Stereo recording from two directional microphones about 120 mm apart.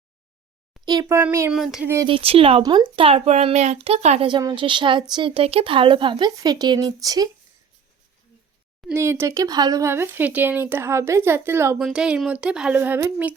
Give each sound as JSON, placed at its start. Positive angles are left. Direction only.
{"t": 1.0, "sound": "a woman's voice", "side_deg": -20}
{"t": 1.5, "sound": "speech", "side_deg": 0}
{"t": 1.8, "sound": "a woman's voice", "side_deg": -20}
{"t": 2.0, "sound": "speech", "side_deg": -50}
{"t": 4.3, "sound": "speech", "side_deg": -40}
{"t": 8.9, "sound": "a woman's voice", "side_deg": -20}
{"t": 9.9, "sound": "a woman's voice", "side_deg": -20}
{"t": 11.8, "sound": "speech", "side_deg": -10}
{"t": 12.8, "sound": "speech", "side_deg": -20}